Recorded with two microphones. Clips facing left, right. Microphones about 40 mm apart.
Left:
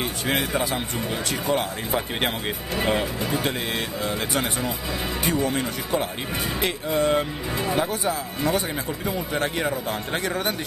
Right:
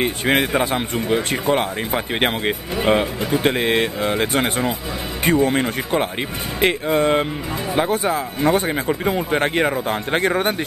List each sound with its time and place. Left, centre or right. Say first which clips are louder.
0.0 s speech: right 7 dB; right